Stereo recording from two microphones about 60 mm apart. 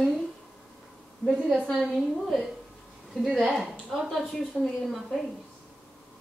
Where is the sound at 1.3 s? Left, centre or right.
Centre.